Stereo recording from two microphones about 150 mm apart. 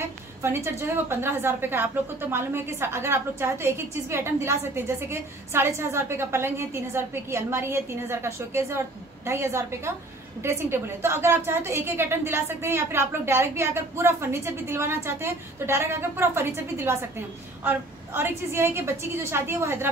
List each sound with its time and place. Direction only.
0.4 s a woman's voice: 15° right (ahead or behind)